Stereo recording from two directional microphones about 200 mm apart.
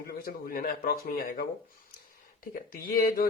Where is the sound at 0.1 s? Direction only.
45° left (ahead or behind).